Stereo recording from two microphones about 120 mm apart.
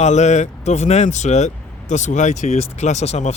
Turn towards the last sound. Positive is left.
turn(degrees=65)  # may be behind; listen again after turning